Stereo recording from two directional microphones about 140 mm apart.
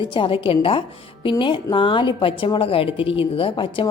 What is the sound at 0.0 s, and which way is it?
A woman's voice, 35° left (ahead or behind).